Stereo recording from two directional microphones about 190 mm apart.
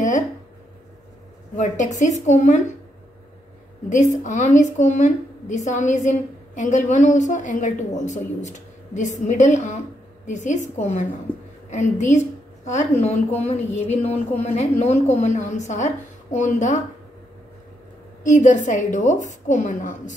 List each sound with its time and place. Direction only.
1.6 s a woman's voice: 40° left (ahead or behind)
3.9 s a woman's voice: 40° left (ahead or behind)
11.3 s a woman's voice: 5° left (ahead or behind)
11.7 s a woman's voice: 40° left (ahead or behind)
18.2 s a woman's voice: 40° left (ahead or behind)